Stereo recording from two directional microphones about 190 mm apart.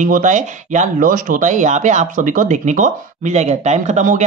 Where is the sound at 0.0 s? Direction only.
40° right (ahead or behind).